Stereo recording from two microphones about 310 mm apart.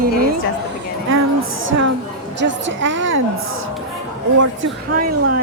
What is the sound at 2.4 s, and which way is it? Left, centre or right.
Speech, right.